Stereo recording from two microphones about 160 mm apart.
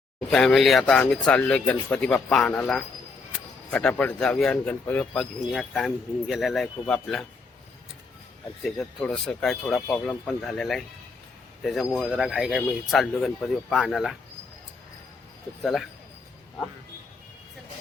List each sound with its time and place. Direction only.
0.3 s speech: centre (ahead or behind)
8.6 s speech: 5° left (ahead or behind)
15.6 s speech: centre (ahead or behind)